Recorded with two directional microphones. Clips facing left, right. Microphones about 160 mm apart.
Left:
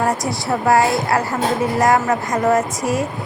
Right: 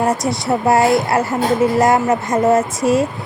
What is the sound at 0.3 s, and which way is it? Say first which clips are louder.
Speech: right 2 dB; 25° right (ahead or behind).